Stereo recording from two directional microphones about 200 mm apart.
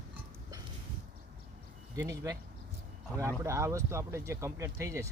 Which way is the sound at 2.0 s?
15° right (ahead or behind).